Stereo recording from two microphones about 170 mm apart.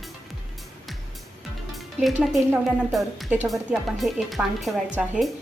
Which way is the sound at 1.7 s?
Centre (ahead or behind).